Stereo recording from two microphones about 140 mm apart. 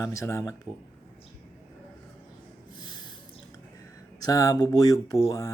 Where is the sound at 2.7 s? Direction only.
30° left (ahead or behind).